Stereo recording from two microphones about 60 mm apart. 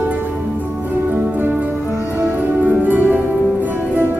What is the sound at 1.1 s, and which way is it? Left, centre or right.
Music, right.